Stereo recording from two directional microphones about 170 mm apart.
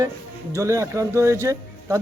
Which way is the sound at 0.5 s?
20° right (ahead or behind).